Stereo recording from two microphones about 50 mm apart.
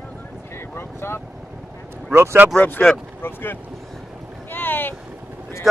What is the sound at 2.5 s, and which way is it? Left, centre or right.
Speech, left.